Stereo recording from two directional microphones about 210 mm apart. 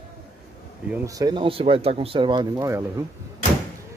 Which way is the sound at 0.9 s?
15° right (ahead or behind).